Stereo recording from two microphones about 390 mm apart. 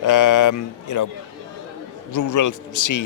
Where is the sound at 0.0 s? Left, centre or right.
Left.